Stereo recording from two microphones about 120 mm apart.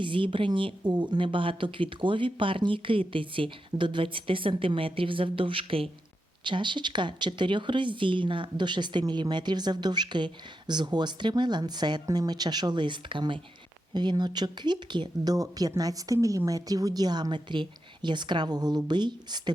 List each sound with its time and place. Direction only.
0.0 s speech: 45° right (ahead or behind)